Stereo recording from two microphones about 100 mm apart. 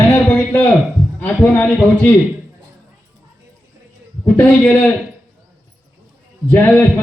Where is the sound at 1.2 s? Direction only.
20° left (ahead or behind).